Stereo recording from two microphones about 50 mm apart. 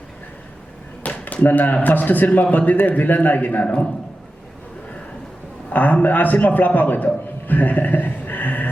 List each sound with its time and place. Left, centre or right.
1.0 s speech: left
5.7 s a man's voice: left